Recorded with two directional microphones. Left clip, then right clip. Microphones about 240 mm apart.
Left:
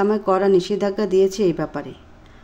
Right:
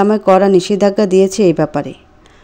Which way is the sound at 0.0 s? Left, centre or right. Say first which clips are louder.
Right 8 dB; right.